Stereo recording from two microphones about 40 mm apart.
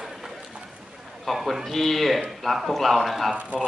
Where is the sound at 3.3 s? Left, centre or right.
Right.